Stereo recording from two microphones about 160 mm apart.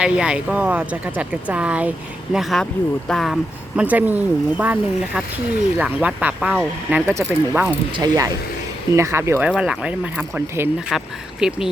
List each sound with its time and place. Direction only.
0.0 s speech: 5° right (ahead or behind)
3.8 s speech: 10° right (ahead or behind)
7.9 s speech: 25° right (ahead or behind)
9.5 s speech: 5° right (ahead or behind)